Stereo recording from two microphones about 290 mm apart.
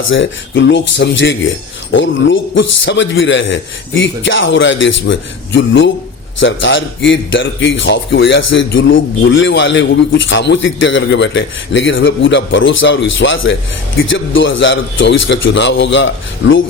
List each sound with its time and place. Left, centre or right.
0.1 s speech: left